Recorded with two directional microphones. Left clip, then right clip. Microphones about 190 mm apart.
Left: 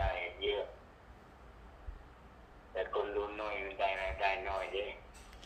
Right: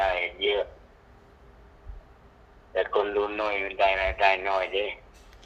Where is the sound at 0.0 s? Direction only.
65° right (ahead or behind).